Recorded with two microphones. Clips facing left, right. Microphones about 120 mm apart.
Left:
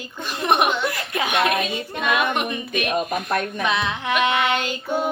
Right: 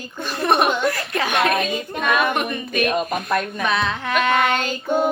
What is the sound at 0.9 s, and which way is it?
Speech, 15° left (ahead or behind).